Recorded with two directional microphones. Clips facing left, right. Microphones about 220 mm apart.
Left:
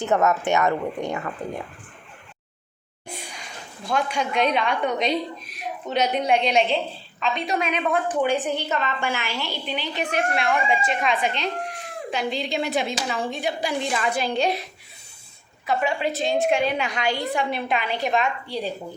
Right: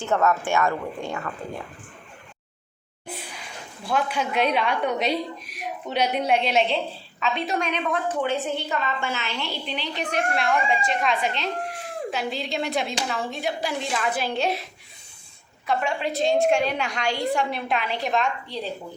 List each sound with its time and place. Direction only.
0.0 s speech: 20° left (ahead or behind)
3.1 s a woman's voice: 5° right (ahead or behind); by 9.4 s 10° left (ahead or behind)
9.4 s a woman's voice: centre (ahead or behind)
15.6 s a woman's voice: 5° left (ahead or behind)